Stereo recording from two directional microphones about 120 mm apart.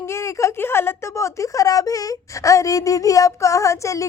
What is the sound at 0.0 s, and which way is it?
A woman's voice, 25° left (ahead or behind).